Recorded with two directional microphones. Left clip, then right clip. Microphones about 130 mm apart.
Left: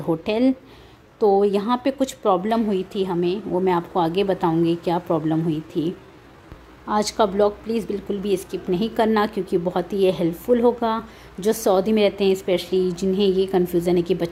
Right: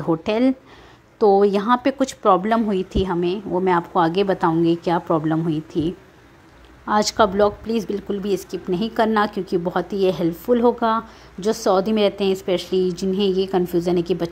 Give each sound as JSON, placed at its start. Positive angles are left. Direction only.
{"t": 0.0, "sound": "a woman's voice", "side_deg": -10}
{"t": 6.9, "sound": "a woman's voice", "side_deg": -15}
{"t": 11.3, "sound": "a woman's voice", "side_deg": 0}